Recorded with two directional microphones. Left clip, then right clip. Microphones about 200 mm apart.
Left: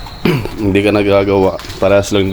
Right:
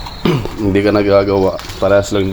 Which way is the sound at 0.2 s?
15° left (ahead or behind).